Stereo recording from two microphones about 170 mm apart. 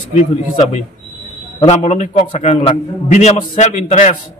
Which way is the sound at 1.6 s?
40° left (ahead or behind).